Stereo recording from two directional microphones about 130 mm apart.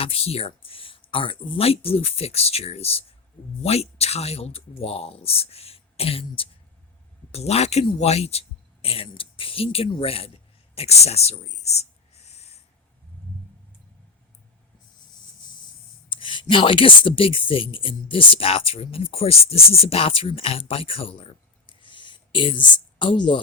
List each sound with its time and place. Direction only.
0.0 s a man's voice: 50° left (ahead or behind)
16.0 s speech: 40° left (ahead or behind)